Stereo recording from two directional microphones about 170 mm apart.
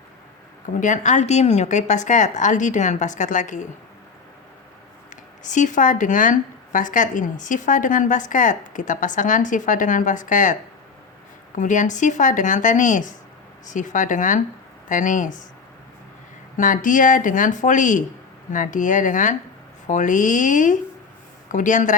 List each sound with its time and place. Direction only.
0.8 s a woman's voice: 45° left (ahead or behind)
5.4 s a woman's voice: 45° left (ahead or behind)
16.6 s a woman's voice: 50° left (ahead or behind)